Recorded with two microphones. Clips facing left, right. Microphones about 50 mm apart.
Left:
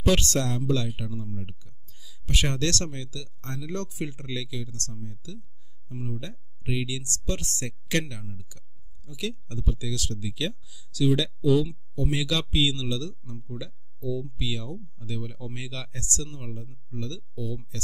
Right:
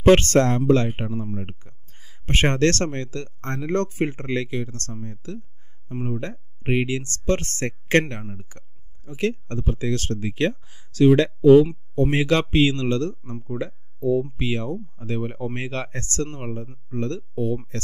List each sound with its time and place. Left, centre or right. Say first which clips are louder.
0.0 s speech: right 9 dB; right